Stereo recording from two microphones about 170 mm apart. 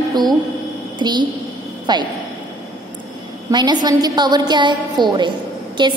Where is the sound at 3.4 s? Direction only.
25° right (ahead or behind).